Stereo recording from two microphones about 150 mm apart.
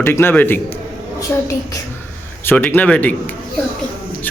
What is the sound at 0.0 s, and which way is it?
Speech, 15° left (ahead or behind).